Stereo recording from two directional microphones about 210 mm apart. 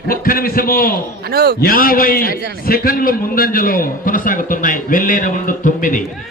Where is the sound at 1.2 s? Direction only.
45° right (ahead or behind).